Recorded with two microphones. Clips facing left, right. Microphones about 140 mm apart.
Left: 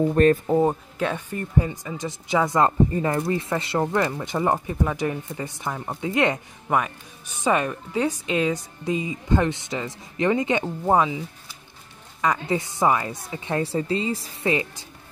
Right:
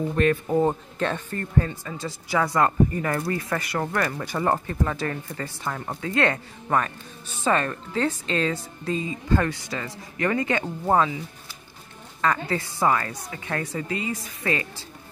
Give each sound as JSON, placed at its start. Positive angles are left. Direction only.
{"t": 0.1, "sound": "speech", "side_deg": 40}
{"t": 0.5, "sound": "speech", "side_deg": 10}
{"t": 14.5, "sound": "speech", "side_deg": 20}